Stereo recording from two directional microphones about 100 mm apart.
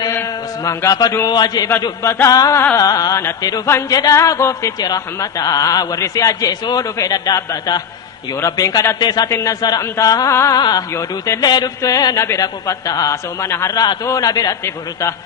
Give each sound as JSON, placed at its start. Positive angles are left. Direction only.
{"t": 0.6, "sound": "a man's voice", "side_deg": 30}
{"t": 1.3, "sound": "a man's voice", "side_deg": 45}
{"t": 2.2, "sound": "a man's voice", "side_deg": 35}
{"t": 9.0, "sound": "a man's voice", "side_deg": 45}
{"t": 10.6, "sound": "a man's voice", "side_deg": 45}